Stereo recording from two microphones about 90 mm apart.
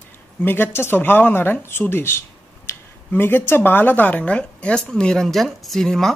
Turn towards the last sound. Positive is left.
turn(degrees=5)  # may be behind; listen again after turning